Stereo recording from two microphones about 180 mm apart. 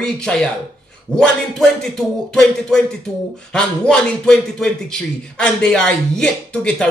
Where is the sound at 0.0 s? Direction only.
5° left (ahead or behind).